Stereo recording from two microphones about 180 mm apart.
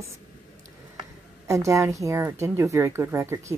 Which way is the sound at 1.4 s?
15° right (ahead or behind).